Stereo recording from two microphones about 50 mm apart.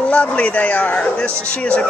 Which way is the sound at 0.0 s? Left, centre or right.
Left.